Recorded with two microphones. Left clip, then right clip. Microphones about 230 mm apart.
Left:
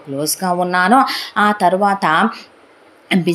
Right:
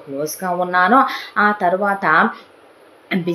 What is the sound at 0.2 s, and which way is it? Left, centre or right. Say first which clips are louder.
A woman's voice: left 3 dB; left.